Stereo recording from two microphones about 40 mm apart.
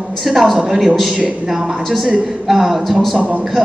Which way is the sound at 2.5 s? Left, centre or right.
Centre.